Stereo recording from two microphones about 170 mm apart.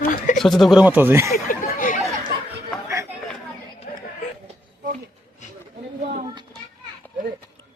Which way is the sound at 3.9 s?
55° left (ahead or behind).